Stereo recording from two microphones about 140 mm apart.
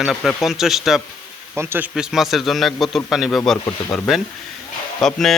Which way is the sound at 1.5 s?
15° right (ahead or behind).